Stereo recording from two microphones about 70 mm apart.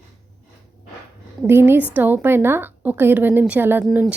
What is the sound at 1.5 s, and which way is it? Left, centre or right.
A woman's voice, right.